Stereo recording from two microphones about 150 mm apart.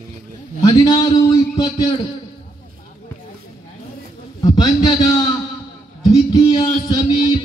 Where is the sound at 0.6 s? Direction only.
30° left (ahead or behind).